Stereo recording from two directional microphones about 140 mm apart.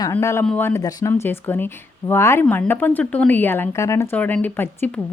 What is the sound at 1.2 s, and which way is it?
Speech, 15° left (ahead or behind).